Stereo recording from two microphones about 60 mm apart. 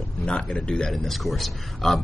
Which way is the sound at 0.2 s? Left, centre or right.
Centre.